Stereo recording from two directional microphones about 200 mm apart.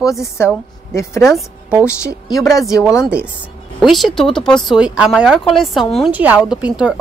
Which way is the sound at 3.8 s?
Centre (ahead or behind).